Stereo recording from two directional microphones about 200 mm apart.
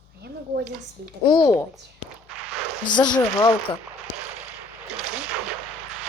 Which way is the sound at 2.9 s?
20° left (ahead or behind).